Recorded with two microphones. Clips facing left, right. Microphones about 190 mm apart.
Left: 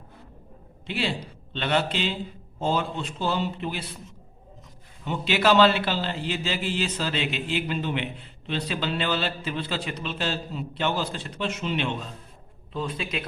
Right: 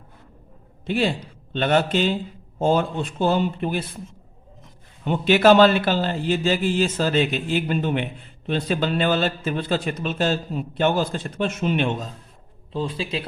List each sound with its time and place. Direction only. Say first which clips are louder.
0.9 s a man's voice: right 6 dB; 45° right (ahead or behind)
5.0 s a man's voice: right 7 dB; 50° right (ahead or behind)
12.7 s a man's voice: right 4 dB; 30° right (ahead or behind)